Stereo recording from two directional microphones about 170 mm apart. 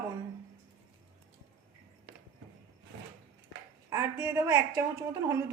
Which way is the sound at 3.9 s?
15° right (ahead or behind).